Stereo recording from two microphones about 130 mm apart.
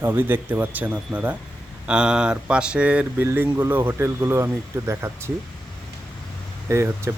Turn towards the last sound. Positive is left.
turn(degrees=-20)  # may be behind; listen again after turning